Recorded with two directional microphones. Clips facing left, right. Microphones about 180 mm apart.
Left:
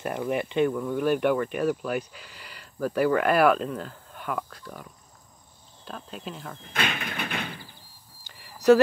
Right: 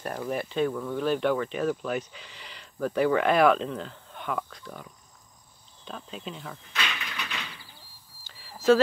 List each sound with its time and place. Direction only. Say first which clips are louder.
0.1 s speech: left 3 dB; 15° left (ahead or behind); by 6.6 s centre (ahead or behind)
6.6 s sliding door: left 6 dB; 50° left (ahead or behind)
8.5 s a sound: left 3 dB; 15° left (ahead or behind)